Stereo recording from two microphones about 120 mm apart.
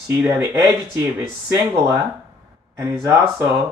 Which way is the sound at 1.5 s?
20° right (ahead or behind).